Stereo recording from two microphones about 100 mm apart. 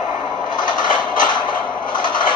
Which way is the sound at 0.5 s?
45° left (ahead or behind).